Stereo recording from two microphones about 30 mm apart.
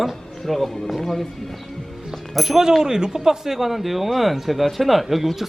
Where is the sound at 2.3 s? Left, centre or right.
Centre.